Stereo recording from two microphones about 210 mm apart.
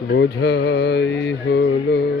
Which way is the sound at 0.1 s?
55° left (ahead or behind).